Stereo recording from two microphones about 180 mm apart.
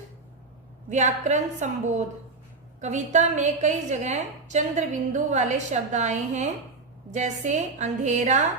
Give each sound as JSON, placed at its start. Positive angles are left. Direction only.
{"t": 0.9, "sound": "a woman's voice", "side_deg": -40}